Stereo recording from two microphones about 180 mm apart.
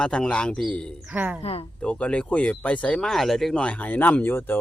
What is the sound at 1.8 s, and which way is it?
Speech, 5° left (ahead or behind).